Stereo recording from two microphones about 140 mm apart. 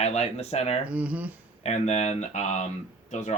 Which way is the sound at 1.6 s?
55° left (ahead or behind).